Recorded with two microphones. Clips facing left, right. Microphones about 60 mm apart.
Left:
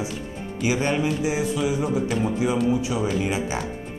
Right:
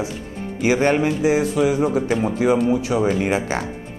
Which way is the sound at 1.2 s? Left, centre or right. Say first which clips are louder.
Right 6 dB; right.